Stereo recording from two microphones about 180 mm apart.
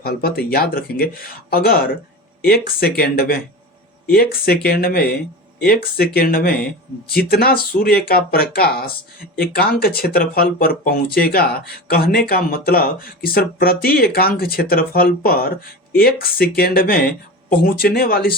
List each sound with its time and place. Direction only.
0.0 s speech: 60° left (ahead or behind)
6.1 s speech: 55° left (ahead or behind)